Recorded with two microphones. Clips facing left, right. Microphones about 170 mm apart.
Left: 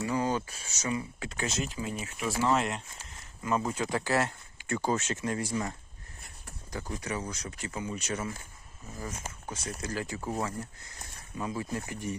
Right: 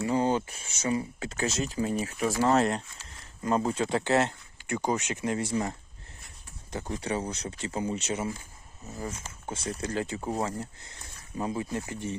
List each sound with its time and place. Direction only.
0.0 s speech: 30° right (ahead or behind)
9.5 s speech: 30° right (ahead or behind)